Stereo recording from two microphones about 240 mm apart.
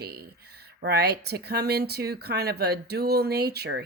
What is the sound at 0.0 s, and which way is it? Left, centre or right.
Speech, right.